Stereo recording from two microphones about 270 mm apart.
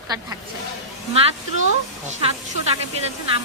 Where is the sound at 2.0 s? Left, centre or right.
Right.